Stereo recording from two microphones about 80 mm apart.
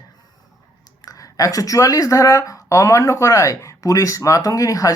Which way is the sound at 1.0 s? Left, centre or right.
Left.